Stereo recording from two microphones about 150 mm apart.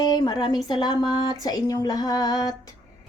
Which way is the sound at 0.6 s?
30° left (ahead or behind).